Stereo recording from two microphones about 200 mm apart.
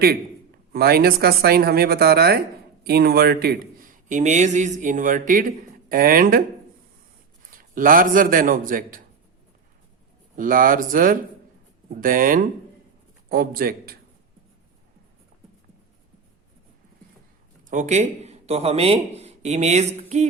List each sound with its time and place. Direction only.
0.7 s a man's voice: 50° right (ahead or behind)
7.5 s speech: 45° right (ahead or behind)
10.3 s speech: 45° right (ahead or behind)
17.7 s a man's voice: 35° right (ahead or behind)